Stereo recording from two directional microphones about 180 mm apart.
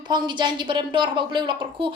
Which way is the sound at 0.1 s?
25° right (ahead or behind).